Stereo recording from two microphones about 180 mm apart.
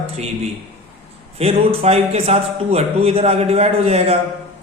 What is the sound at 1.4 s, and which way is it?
Speech, 35° right (ahead or behind).